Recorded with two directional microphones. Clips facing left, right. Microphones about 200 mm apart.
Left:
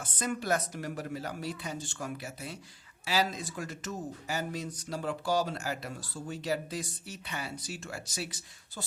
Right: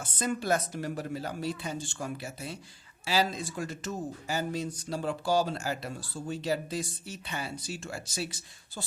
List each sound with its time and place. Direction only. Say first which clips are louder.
0.0 s speech: right 2 dB; 30° right (ahead or behind)